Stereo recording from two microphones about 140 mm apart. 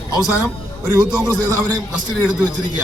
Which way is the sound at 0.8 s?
25° right (ahead or behind).